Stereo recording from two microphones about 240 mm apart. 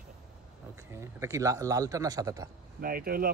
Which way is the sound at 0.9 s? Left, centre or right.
Centre.